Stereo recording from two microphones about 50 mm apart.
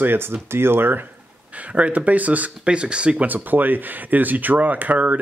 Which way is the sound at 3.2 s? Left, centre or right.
Right.